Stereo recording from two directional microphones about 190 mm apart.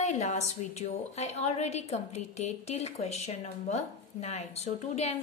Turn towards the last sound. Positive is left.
turn(degrees=35)  # may be behind; listen again after turning